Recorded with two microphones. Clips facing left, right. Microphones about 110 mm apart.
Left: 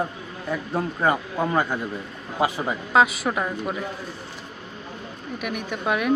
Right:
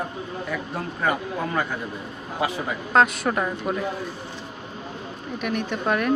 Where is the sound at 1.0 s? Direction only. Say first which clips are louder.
Left 1 dB; 30° left (ahead or behind).